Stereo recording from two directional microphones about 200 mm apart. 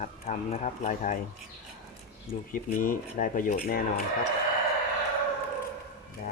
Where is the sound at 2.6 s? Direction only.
40° left (ahead or behind).